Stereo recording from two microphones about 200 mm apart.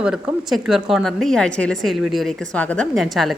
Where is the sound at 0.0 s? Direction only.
5° right (ahead or behind).